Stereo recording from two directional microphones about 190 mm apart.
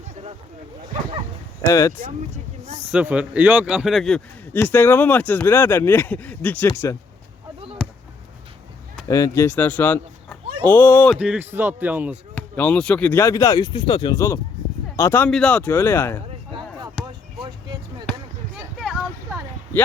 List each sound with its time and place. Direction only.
2.3 s a sound: 35° right (ahead or behind)
2.9 s a man's voice: 5° right (ahead or behind); by 6.7 s 10° left (ahead or behind)
7.8 s basketball bounce: centre (ahead or behind)
9.0 s speech: 20° left (ahead or behind)
11.2 s speech: 5° right (ahead or behind)
12.3 s a man's voice: 10° left (ahead or behind)
16.2 s a sound: 25° right (ahead or behind)